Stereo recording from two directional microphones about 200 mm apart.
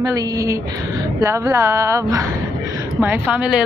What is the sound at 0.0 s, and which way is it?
A woman's voice, 20° right (ahead or behind).